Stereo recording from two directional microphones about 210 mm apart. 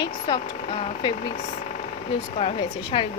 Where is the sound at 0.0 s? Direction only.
20° left (ahead or behind).